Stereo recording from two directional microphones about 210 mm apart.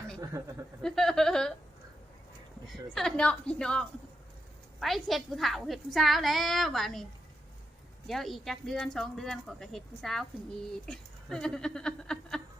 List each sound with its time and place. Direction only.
0.2 s speech: 15° right (ahead or behind)
0.8 s speech: centre (ahead or behind)
2.6 s speech: centre (ahead or behind)
8.0 s speech: centre (ahead or behind)